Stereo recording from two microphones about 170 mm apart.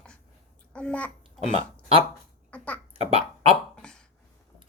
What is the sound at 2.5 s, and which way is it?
Speech, 10° left (ahead or behind).